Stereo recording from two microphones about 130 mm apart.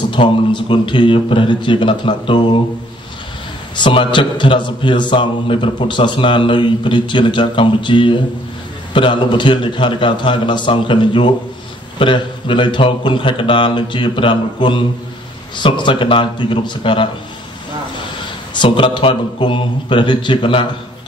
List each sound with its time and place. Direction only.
0.1 s a man's voice: 35° left (ahead or behind)
3.7 s a man's voice: 40° left (ahead or behind)
18.5 s a man's voice: 40° left (ahead or behind)